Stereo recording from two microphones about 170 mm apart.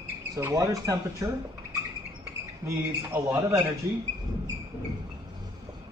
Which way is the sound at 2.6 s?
15° right (ahead or behind).